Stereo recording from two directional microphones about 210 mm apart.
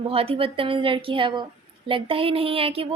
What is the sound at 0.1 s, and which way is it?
A woman's voice, 25° right (ahead or behind).